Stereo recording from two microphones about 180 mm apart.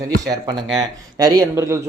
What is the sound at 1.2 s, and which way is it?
Speech, 20° right (ahead or behind).